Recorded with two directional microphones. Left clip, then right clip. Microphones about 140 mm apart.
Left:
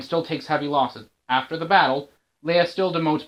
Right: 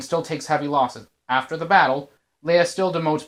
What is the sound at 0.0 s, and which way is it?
Speech, 50° right (ahead or behind).